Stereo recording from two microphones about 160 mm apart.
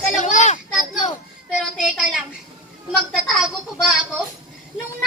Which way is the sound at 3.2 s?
Centre (ahead or behind).